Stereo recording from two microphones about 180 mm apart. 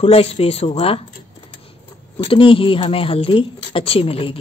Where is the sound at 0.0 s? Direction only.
35° left (ahead or behind).